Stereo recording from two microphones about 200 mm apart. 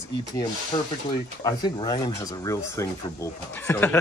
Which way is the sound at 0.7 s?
20° left (ahead or behind).